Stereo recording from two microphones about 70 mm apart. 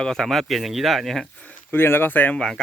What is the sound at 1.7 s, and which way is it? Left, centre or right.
Speech, left.